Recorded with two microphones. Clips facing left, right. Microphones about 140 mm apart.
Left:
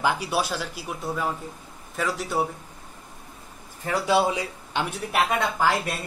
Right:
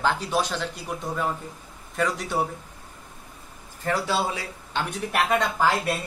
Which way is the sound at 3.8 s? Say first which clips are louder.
Left 3 dB; 15° left (ahead or behind).